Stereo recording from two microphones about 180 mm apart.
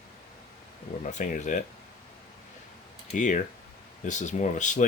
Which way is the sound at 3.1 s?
45° left (ahead or behind).